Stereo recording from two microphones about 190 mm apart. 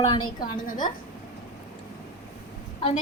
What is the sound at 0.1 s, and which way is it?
Speech, 25° left (ahead or behind).